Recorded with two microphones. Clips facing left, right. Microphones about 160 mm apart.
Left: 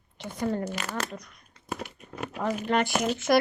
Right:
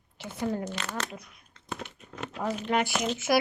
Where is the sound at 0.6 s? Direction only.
10° left (ahead or behind).